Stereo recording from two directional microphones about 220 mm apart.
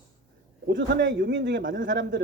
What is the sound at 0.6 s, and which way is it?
Speech, 55° right (ahead or behind).